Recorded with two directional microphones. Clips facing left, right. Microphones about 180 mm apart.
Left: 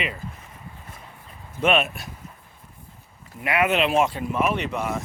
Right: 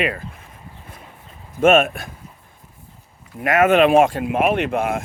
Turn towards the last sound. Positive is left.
turn(degrees=-55)  # may be behind; listen again after turning